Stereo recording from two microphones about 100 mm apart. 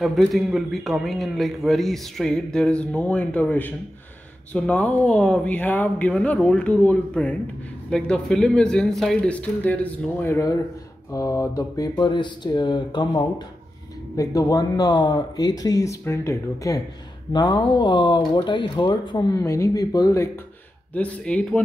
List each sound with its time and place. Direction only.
0.0 s a man's voice: centre (ahead or behind); by 10.4 s 20° left (ahead or behind)
11.1 s speech: 35° left (ahead or behind)
12.0 s speech: 50° left (ahead or behind)
14.1 s speech: 35° left (ahead or behind)
17.3 s speech: 45° left (ahead or behind)
19.3 s speech: 30° left (ahead or behind)
20.9 s speech: 10° left (ahead or behind)